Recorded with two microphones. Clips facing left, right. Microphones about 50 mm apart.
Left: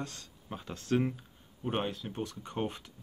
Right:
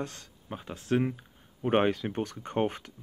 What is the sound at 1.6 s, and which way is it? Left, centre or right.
Speech, right.